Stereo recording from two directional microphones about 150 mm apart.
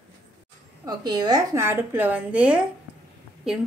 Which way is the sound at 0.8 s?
30° right (ahead or behind).